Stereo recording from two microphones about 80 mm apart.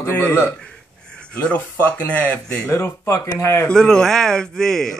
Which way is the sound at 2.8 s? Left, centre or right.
Left.